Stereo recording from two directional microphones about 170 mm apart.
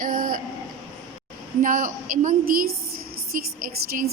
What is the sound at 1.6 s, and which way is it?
A woman's voice, 50° right (ahead or behind).